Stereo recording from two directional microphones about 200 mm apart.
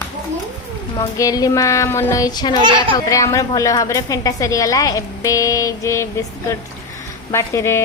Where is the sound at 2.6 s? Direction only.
20° right (ahead or behind).